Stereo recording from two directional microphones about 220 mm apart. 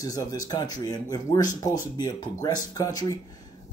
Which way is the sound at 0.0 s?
15° left (ahead or behind).